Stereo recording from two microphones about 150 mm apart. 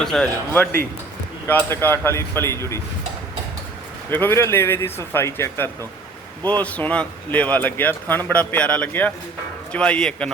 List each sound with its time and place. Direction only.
0.0 s speech: 5° left (ahead or behind); by 2.8 s 20° left (ahead or behind)
4.1 s speech: 15° left (ahead or behind)